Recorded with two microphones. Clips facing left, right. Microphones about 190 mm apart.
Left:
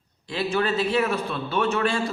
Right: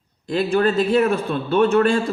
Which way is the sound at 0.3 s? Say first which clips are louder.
Right 6 dB; 45° right (ahead or behind).